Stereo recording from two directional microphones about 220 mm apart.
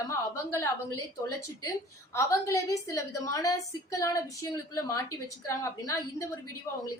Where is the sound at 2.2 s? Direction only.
15° left (ahead or behind).